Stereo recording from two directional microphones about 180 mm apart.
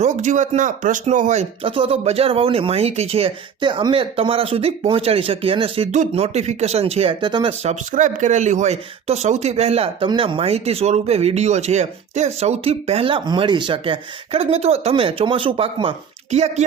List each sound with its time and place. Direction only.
0.0 s speech: 40° right (ahead or behind); by 7.5 s 25° right (ahead or behind)
7.6 s speech: 40° right (ahead or behind)